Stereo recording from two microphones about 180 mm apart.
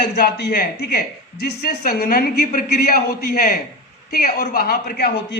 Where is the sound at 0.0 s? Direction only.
65° left (ahead or behind).